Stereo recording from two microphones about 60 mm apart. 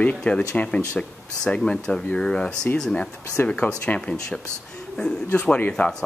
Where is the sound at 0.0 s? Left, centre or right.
Centre.